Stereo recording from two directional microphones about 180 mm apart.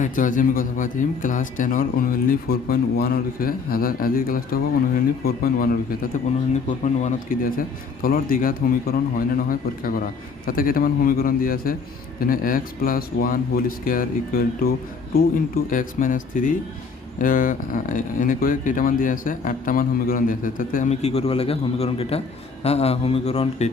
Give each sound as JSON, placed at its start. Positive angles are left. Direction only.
{"t": 0.0, "sound": "speech", "side_deg": 45}
{"t": 6.5, "sound": "a man's voice", "side_deg": 40}